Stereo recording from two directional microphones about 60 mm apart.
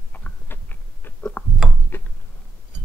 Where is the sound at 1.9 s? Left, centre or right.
Left.